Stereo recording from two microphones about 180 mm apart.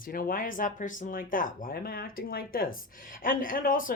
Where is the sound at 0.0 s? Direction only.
50° left (ahead or behind).